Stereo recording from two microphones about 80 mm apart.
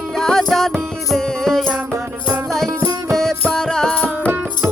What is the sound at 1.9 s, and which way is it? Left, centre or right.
Music, right.